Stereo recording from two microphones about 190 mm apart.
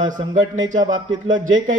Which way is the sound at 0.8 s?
20° right (ahead or behind).